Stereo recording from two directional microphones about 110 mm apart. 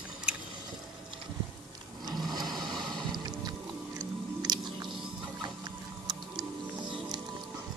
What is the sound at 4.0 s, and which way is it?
Chewing, 40° right (ahead or behind).